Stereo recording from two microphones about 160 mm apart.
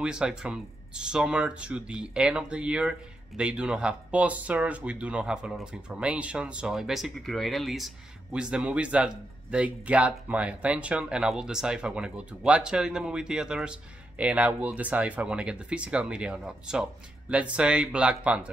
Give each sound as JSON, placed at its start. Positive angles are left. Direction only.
{"t": 0.0, "sound": "speech", "side_deg": -5}